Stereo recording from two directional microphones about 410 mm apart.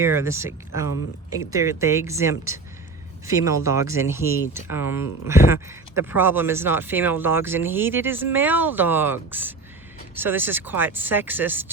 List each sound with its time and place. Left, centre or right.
0.0 s speech: centre